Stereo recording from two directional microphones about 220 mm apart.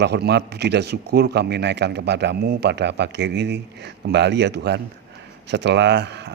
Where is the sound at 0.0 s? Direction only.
50° right (ahead or behind).